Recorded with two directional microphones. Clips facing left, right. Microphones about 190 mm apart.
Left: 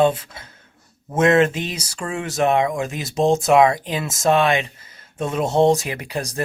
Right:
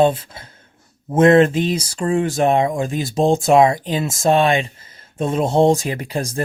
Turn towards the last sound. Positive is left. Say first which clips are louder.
# right 3 dB
turn(degrees=-30)  # may be behind; listen again after turning